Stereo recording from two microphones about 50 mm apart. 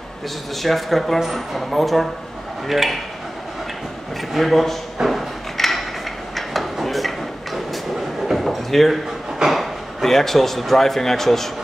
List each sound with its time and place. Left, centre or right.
0.6 s speech: centre
4.3 s speech: centre
5.0 s a sound: centre
9.5 s speech: centre